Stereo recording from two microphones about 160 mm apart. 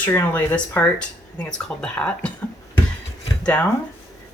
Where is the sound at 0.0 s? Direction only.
10° left (ahead or behind).